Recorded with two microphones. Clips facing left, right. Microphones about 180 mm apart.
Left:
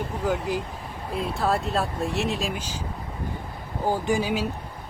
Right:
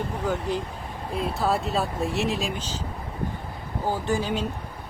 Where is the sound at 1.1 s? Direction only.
Centre (ahead or behind).